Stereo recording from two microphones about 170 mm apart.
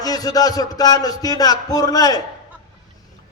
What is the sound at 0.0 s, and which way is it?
A man's voice, 20° left (ahead or behind).